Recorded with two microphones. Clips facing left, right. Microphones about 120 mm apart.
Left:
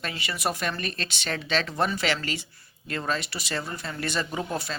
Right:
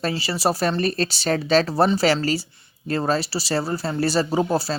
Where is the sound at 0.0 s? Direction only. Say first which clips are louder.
Right 8 dB; 30° right (ahead or behind).